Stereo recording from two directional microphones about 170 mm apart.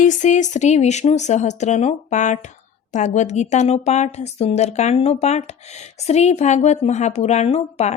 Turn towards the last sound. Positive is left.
turn(degrees=40)  # may be behind; listen again after turning